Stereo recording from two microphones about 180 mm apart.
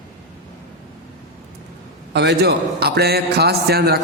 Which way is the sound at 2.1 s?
70° right (ahead or behind).